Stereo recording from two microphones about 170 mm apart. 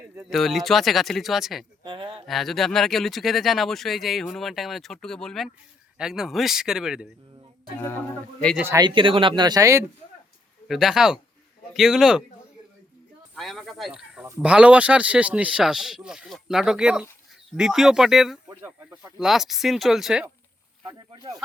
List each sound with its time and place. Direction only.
0.2 s speech: centre (ahead or behind)
1.8 s a sound: 30° right (ahead or behind)
2.2 s speech: centre (ahead or behind)
7.8 s a man's voice: 15° left (ahead or behind)
8.5 s speech: 15° right (ahead or behind)
8.8 s speech: 30° right (ahead or behind)
10.7 s speech: centre (ahead or behind)
13.3 s snake: centre (ahead or behind)
14.3 s speech: 10° right (ahead or behind)
20.8 s speech: 20° right (ahead or behind)